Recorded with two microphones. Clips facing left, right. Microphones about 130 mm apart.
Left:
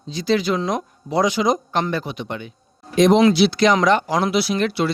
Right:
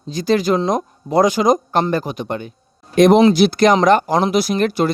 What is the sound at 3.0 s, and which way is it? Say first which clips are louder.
A man's voice: right 3 dB; 55° right (ahead or behind).